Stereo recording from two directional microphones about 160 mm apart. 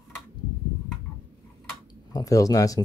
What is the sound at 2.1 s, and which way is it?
Speech, 20° left (ahead or behind).